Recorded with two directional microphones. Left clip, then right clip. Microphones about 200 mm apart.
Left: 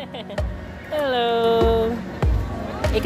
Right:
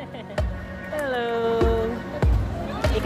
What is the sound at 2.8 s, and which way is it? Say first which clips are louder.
Music: left 2 dB; centre (ahead or behind).